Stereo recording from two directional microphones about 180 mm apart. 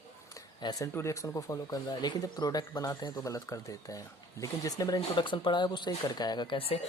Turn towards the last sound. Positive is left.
turn(degrees=30)  # may be behind; listen again after turning